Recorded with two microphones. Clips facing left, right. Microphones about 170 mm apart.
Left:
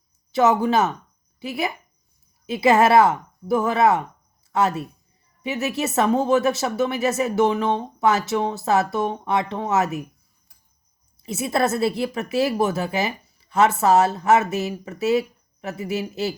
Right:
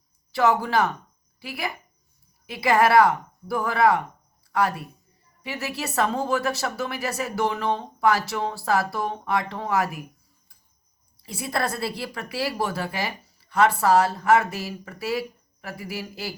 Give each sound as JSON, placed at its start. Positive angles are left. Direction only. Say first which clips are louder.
{"t": 0.3, "sound": "speech", "louder": "left 4 dB", "side_deg": 20}
{"t": 11.2, "sound": "speech", "louder": "left 6 dB", "side_deg": 20}